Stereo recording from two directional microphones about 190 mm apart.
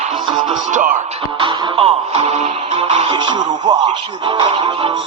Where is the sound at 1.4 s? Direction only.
30° right (ahead or behind).